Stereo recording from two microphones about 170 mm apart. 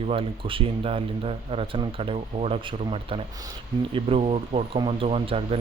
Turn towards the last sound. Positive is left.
turn(degrees=-35)  # may be behind; listen again after turning